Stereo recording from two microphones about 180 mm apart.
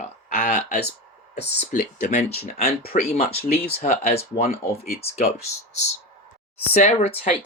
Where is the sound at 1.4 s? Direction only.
40° left (ahead or behind).